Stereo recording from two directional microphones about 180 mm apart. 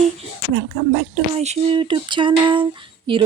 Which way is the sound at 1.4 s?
35° right (ahead or behind).